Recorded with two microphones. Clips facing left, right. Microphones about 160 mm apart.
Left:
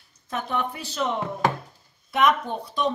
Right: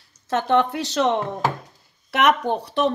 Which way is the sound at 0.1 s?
85° right.